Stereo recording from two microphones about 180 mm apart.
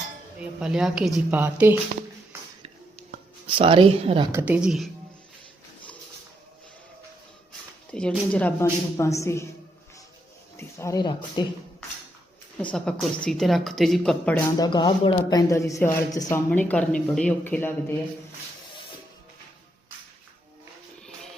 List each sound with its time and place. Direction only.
0.3 s speech: 5° right (ahead or behind)
3.4 s speech: 30° right (ahead or behind)
4.3 s speech: 10° right (ahead or behind)
7.9 s speech: 5° left (ahead or behind)
10.6 s speech: 15° left (ahead or behind)
12.7 s speech: 5° left (ahead or behind)
14.6 s speech: 25° left (ahead or behind)